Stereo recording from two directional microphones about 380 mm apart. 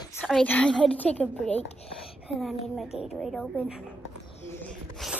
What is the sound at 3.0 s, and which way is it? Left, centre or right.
Speech, centre.